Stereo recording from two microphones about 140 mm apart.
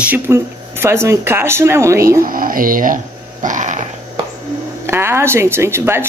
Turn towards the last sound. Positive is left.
turn(degrees=-15)  # may be behind; listen again after turning